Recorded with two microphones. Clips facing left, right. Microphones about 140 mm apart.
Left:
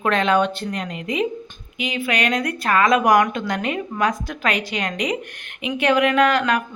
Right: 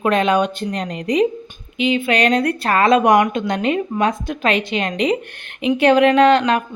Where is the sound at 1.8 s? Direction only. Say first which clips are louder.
Right 6 dB; 25° right (ahead or behind).